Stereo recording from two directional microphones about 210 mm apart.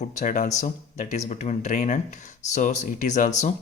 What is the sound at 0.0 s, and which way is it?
Speech, 35° left (ahead or behind).